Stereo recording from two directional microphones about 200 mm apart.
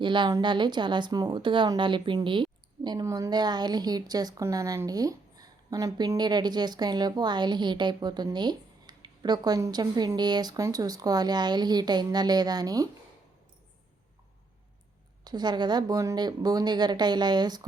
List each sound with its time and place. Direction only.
0.0 s speech: 25° right (ahead or behind)
15.2 s speech: 20° right (ahead or behind)